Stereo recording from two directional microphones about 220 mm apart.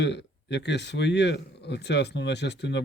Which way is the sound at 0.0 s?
50° left (ahead or behind).